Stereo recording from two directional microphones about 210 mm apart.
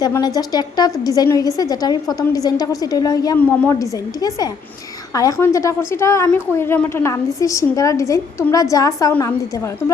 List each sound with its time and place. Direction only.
0.0 s a woman's voice: 20° left (ahead or behind)